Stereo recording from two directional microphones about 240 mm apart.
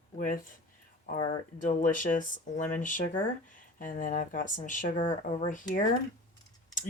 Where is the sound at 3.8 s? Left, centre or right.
Left.